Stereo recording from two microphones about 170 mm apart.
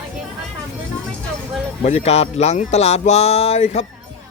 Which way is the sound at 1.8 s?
40° left (ahead or behind).